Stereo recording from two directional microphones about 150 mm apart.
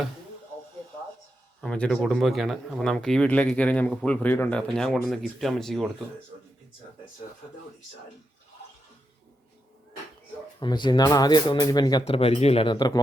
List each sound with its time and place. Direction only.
1.6 s speech: 5° left (ahead or behind)
10.6 s speech: 30° left (ahead or behind)
12.0 s speech: 40° left (ahead or behind)